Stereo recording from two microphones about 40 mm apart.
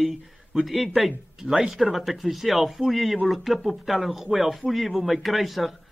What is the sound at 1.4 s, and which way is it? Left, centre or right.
Speech, centre.